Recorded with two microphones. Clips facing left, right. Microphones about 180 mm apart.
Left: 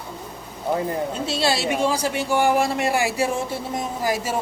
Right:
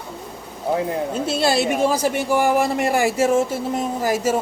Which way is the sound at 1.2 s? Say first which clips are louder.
Right 5 dB; 50° right (ahead or behind).